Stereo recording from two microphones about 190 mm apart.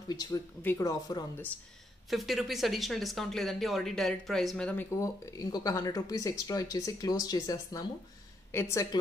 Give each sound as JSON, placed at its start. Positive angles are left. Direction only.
{"t": 0.1, "sound": "speech", "side_deg": 20}
{"t": 2.0, "sound": "a woman's voice", "side_deg": 0}